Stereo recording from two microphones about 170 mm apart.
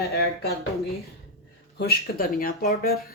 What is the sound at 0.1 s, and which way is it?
Speech, 65° left (ahead or behind).